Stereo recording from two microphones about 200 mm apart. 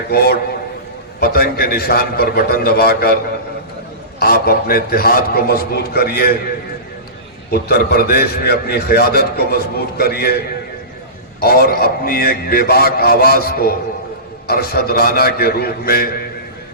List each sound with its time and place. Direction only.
0.1 s a man's voice: 50° left (ahead or behind)
4.2 s a man's voice: 50° left (ahead or behind)
7.5 s a man's voice: 50° left (ahead or behind)
11.3 s a man's voice: 50° left (ahead or behind)